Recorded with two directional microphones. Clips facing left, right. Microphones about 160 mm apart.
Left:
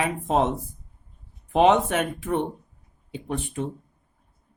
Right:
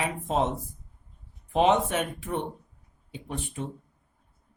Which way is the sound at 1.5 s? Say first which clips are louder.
Left 4 dB; 70° left (ahead or behind).